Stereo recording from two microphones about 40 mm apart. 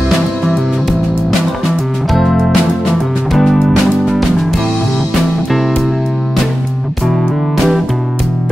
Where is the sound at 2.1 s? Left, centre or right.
Centre.